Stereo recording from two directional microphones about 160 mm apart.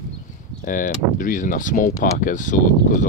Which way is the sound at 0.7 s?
55° left (ahead or behind).